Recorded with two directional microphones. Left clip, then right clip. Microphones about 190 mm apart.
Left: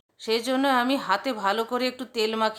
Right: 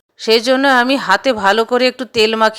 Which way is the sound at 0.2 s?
30° right (ahead or behind).